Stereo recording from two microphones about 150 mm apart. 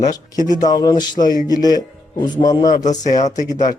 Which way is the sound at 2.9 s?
50° left (ahead or behind).